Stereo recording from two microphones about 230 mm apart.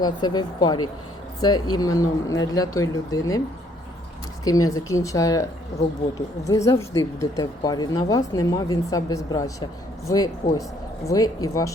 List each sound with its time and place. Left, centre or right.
0.0 s speech: centre
4.4 s speech: centre
6.5 s speech: centre